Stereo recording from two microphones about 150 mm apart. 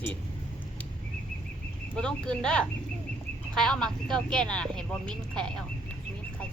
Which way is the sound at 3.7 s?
5° left (ahead or behind).